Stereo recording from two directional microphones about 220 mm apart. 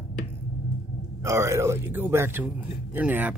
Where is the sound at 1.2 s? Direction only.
15° right (ahead or behind).